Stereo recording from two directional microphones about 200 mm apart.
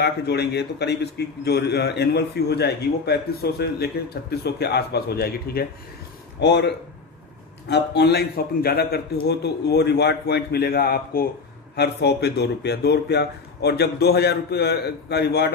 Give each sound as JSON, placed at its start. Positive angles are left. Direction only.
{"t": 0.0, "sound": "a man's voice", "side_deg": 55}